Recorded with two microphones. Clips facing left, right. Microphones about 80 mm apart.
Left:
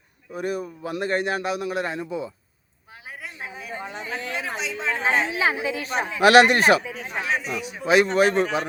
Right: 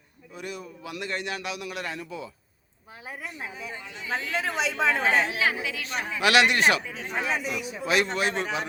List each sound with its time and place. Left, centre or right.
0.3 s a man's voice: left
4.2 s a man's voice: left
4.7 s a woman's voice: right
5.2 s a woman's voice: left
6.8 s speech: centre
7.4 s a man's voice: left